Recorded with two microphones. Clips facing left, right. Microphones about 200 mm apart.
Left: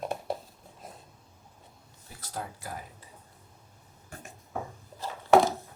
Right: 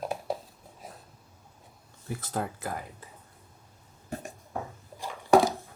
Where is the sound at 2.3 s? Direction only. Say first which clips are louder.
Right 5 dB; 90° right.